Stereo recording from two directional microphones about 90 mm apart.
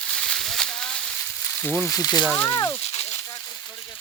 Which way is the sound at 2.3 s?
35° left (ahead or behind).